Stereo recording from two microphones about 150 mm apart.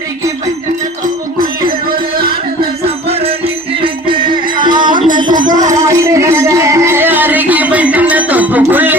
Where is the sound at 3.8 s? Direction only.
35° right (ahead or behind).